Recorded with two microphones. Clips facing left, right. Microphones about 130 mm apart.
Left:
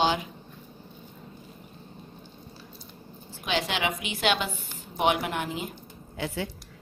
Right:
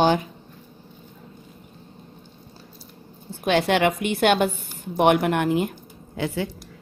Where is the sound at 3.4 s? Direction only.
55° right (ahead or behind); by 6.5 s 90° right.